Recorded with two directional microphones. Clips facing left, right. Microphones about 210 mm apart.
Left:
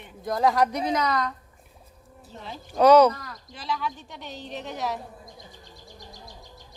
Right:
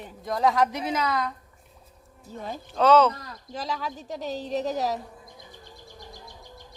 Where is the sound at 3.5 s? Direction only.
40° right (ahead or behind).